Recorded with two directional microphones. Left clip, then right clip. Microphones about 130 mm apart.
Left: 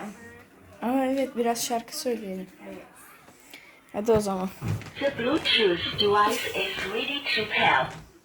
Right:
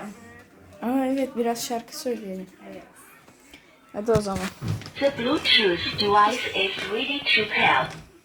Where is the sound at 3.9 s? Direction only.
30° left (ahead or behind).